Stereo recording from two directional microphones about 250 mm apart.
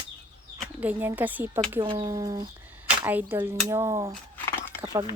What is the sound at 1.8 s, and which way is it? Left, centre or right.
Speech, centre.